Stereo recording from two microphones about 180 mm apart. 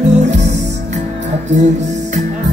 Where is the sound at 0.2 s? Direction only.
40° right (ahead or behind).